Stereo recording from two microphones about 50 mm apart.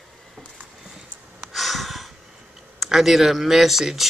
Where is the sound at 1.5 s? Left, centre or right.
Centre.